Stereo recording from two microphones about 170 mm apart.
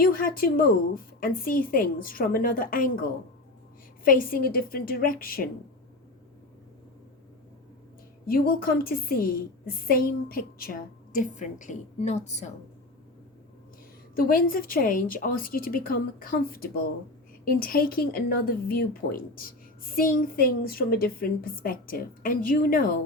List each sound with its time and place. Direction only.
0.0 s speech: 60° left (ahead or behind)
4.0 s speech: 55° left (ahead or behind)
8.3 s speech: 60° left (ahead or behind); by 12.5 s 40° left (ahead or behind)
14.2 s speech: 55° left (ahead or behind)